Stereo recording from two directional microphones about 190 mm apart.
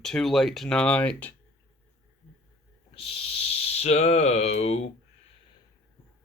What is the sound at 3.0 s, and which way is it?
Speech, 30° left (ahead or behind).